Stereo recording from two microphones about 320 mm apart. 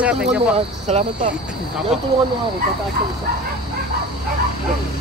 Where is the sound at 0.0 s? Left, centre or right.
Centre.